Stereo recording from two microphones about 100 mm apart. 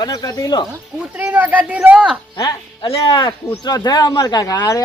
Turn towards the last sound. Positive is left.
turn(degrees=35)  # may be behind; listen again after turning